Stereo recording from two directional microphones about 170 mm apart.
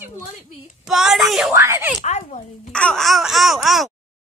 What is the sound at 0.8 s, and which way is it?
Laughter, centre (ahead or behind).